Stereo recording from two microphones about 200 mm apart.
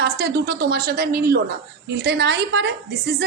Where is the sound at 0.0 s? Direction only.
55° right (ahead or behind).